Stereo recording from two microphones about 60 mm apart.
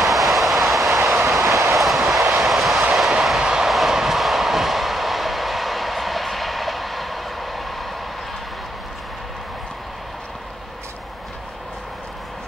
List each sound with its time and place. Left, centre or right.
0.0 s vehicle: centre
1.0 s train: centre
1.4 s train: right
1.8 s train: centre
3.3 s vehicle: centre